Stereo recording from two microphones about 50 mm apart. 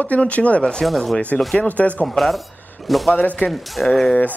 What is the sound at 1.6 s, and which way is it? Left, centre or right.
Speech, left.